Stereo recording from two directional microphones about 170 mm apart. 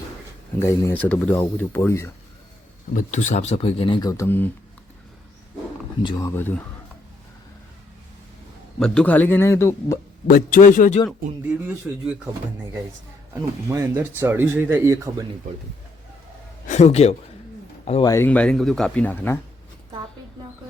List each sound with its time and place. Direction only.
0.6 s speech: 15° left (ahead or behind)
2.9 s speech: 50° left (ahead or behind); by 4.5 s 10° left (ahead or behind)
6.0 s speech: 25° left (ahead or behind)
8.8 s speech: 5° left (ahead or behind)
10.2 s a man's voice: 55° left (ahead or behind)
11.7 s speech: 5° right (ahead or behind)
13.3 s speech: 15° right (ahead or behind)
16.6 s speech: 40° left (ahead or behind)
18.0 s speech: 15° left (ahead or behind)